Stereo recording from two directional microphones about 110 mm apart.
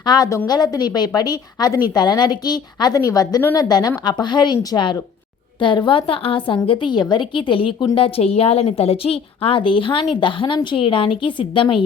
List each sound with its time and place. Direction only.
0.0 s a woman's voice: 40° left (ahead or behind)